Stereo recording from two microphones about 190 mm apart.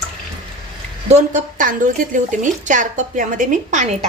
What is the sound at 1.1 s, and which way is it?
A woman's voice, 40° right (ahead or behind).